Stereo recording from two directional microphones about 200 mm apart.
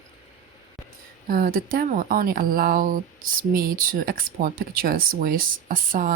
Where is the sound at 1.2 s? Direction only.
45° right (ahead or behind).